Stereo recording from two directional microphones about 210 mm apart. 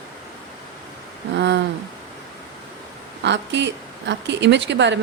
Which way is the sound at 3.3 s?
55° right (ahead or behind).